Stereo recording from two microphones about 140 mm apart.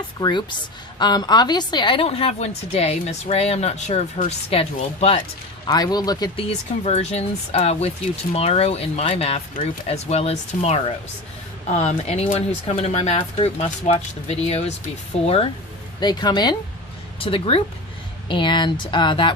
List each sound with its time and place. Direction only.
0.2 s a woman's voice: 35° left (ahead or behind)
5.6 s speech: 30° left (ahead or behind)
6.5 s a woman's voice: 50° left (ahead or behind)
16.0 s speech: 30° left (ahead or behind)
17.2 s speech: 40° left (ahead or behind)